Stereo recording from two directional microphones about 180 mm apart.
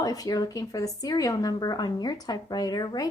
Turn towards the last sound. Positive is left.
turn(degrees=20)  # may be behind; listen again after turning